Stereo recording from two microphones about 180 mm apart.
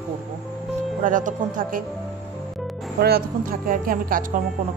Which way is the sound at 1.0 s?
45° right (ahead or behind).